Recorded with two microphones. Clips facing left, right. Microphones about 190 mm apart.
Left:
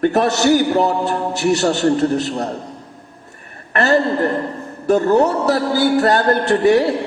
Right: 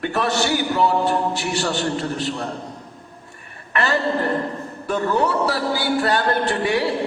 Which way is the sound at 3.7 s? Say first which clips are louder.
Left 5 dB; 40° left (ahead or behind).